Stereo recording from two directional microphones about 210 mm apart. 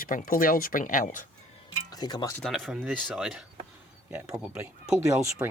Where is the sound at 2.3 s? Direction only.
Centre (ahead or behind).